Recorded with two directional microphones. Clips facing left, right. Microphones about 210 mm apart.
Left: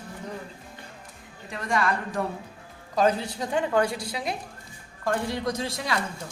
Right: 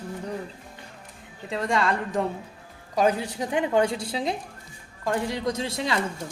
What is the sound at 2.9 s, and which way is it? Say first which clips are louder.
A woman's voice: even; 15° right (ahead or behind).